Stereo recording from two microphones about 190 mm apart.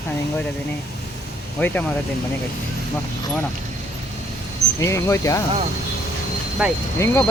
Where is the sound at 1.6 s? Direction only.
10° left (ahead or behind).